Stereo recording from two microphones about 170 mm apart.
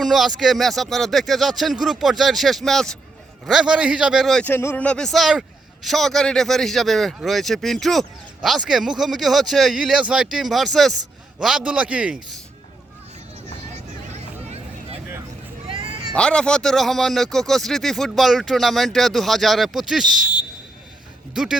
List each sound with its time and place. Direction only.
0.0 s a man's voice: centre (ahead or behind)
13.7 s vehicle: 40° right (ahead or behind)
15.6 s a sound: 30° right (ahead or behind)
16.1 s a man's voice: 5° left (ahead or behind)
21.4 s a man's voice: 5° right (ahead or behind)